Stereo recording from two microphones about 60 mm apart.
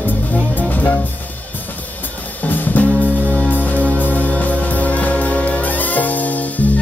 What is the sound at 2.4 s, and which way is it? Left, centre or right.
Music, left.